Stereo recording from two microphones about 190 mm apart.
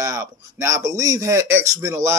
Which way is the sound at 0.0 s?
15° right (ahead or behind).